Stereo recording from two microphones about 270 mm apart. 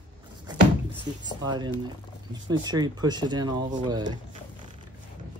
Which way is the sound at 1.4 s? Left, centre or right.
Centre.